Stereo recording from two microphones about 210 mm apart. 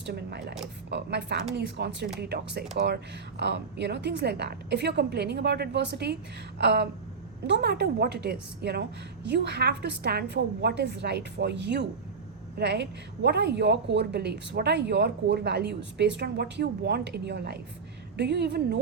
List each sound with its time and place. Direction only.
0.0 s a woman's voice: 55° right (ahead or behind)